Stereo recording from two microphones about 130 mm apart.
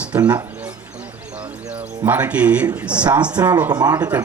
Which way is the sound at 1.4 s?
10° right (ahead or behind).